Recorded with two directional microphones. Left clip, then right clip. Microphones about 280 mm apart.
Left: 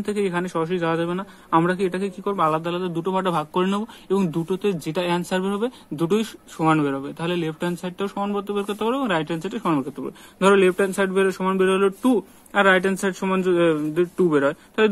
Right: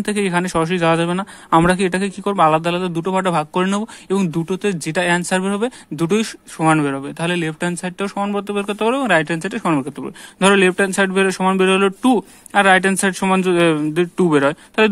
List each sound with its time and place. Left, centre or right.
0.1 s speech: right